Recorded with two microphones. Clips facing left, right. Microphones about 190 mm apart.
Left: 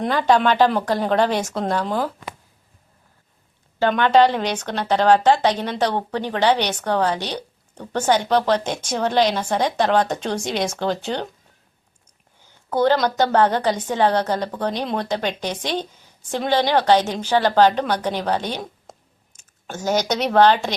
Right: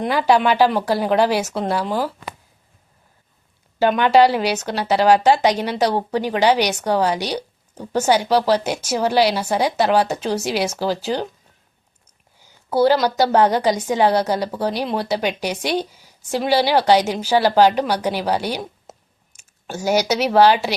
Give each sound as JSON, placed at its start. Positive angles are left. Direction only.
{"t": 0.0, "sound": "speech", "side_deg": -10}
{"t": 3.8, "sound": "speech", "side_deg": -10}
{"t": 12.4, "sound": "speech", "side_deg": -10}